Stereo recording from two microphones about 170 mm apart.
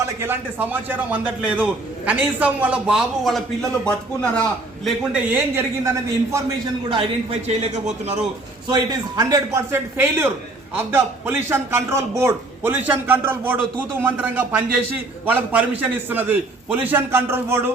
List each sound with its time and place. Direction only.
0.0 s a man's voice: 15° right (ahead or behind); by 4.4 s 5° left (ahead or behind)
4.9 s a man's voice: 10° right (ahead or behind)
6.9 s a man's voice: 35° right (ahead or behind)
9.1 s a man's voice: 20° right (ahead or behind)